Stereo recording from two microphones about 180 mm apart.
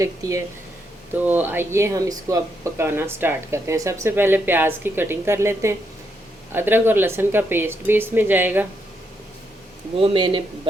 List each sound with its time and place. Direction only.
0.0 s speech: 15° right (ahead or behind)
10.0 s speech: 25° right (ahead or behind)